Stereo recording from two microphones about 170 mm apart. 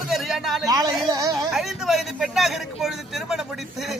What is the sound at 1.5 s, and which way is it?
A man's voice, centre (ahead or behind).